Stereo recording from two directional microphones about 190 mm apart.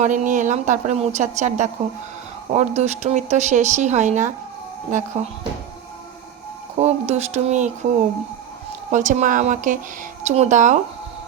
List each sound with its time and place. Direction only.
0.0 s speech: 40° right (ahead or behind)
6.7 s speech: 35° right (ahead or behind)
8.9 s speech: 40° right (ahead or behind)